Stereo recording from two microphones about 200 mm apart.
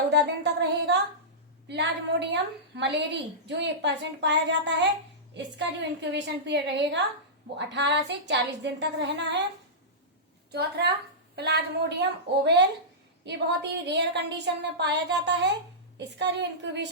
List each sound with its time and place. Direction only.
0.1 s a woman's voice: 60° right (ahead or behind)
10.5 s a woman's voice: 55° right (ahead or behind)